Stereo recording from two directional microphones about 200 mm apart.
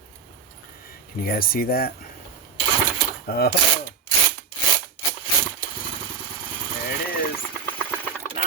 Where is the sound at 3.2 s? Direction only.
50° left (ahead or behind).